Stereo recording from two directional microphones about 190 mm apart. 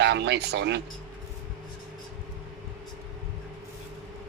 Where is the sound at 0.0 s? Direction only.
65° right (ahead or behind).